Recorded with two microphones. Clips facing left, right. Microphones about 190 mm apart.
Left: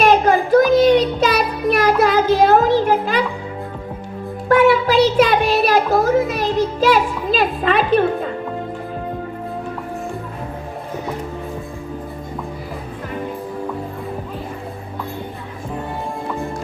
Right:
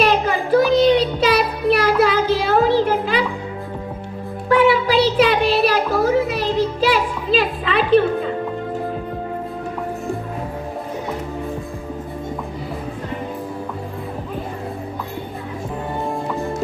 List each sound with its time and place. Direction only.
0.0 s child singing: 45° left (ahead or behind)
4.4 s music: 45° left (ahead or behind)